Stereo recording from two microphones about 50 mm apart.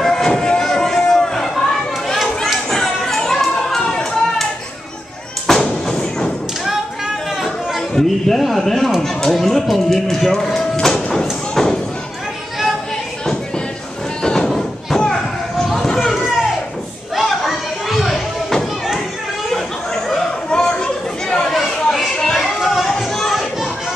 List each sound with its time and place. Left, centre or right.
0.0 s a sound: centre
5.5 s a sound: centre
5.9 s thump: centre
7.9 s a man's voice: centre
14.2 s sheep: centre
15.0 s basketball bounce: centre
17.1 s children playing: centre
20.4 s chatter: centre
21.5 s chatter: centre
22.3 s children playing: centre
22.8 s a sound: centre